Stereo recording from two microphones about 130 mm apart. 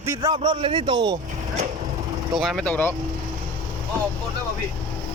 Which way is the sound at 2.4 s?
Centre (ahead or behind).